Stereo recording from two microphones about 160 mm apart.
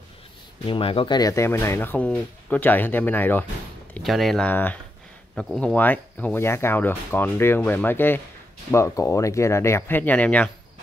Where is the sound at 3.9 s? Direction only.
Centre (ahead or behind).